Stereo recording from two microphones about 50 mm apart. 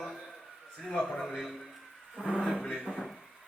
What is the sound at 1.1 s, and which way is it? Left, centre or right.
Speech, centre.